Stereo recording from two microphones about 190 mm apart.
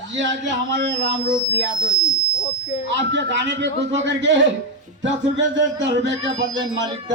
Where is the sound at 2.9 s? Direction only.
70° right (ahead or behind).